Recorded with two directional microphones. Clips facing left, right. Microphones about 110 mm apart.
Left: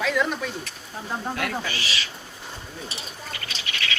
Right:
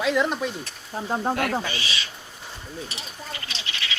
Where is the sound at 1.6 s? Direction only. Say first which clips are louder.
Even; 20° right (ahead or behind).